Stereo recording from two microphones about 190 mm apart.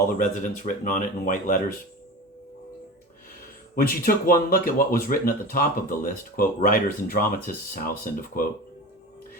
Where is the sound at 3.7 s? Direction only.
50° left (ahead or behind).